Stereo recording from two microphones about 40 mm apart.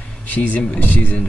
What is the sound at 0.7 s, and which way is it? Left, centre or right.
Speech, left.